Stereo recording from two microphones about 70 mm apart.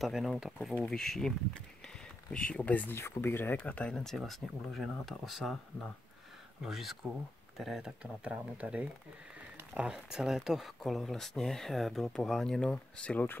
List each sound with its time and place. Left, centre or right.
0.0 s speech: centre
2.3 s speech: centre
3.6 s speech: centre
4.6 s speech: centre
6.6 s speech: centre
8.0 s speech: centre
12.7 s speech: centre